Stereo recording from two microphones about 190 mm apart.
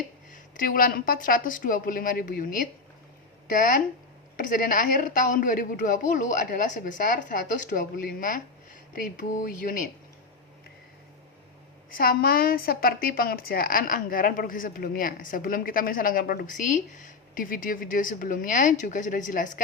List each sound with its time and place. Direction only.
0.5 s a woman's voice: 45° left (ahead or behind)
11.9 s a woman's voice: 50° left (ahead or behind)